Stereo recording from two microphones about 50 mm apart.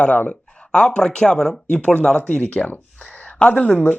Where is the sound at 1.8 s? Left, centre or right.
Left.